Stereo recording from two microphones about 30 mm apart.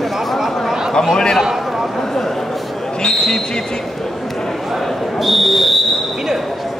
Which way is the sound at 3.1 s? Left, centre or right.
Centre.